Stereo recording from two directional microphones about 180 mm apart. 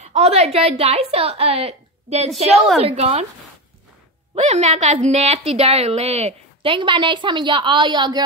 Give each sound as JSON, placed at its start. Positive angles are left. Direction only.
{"t": 0.0, "sound": "a woman's voice", "side_deg": -35}
{"t": 4.4, "sound": "a woman's voice", "side_deg": -40}